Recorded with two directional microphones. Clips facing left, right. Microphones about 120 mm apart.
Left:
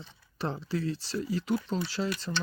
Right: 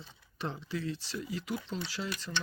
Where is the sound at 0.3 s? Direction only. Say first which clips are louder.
Left 5 dB; 35° left (ahead or behind).